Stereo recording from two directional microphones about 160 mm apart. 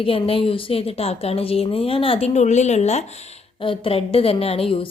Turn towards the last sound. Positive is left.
turn(degrees=35)  # may be behind; listen again after turning